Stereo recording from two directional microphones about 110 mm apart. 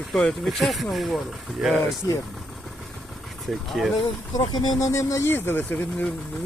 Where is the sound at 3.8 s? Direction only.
Centre (ahead or behind).